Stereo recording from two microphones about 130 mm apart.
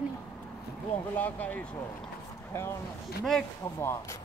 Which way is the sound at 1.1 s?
15° left (ahead or behind).